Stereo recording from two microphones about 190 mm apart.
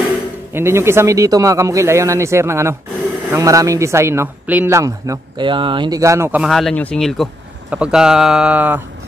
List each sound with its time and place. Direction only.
0.5 s speech: 10° right (ahead or behind)
6.4 s speech: centre (ahead or behind)